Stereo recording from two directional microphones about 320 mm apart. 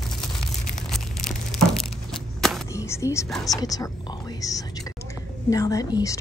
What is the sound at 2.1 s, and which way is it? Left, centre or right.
Whispering, centre.